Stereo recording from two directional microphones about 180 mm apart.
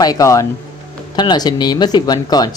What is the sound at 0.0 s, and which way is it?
A man's voice, 20° left (ahead or behind).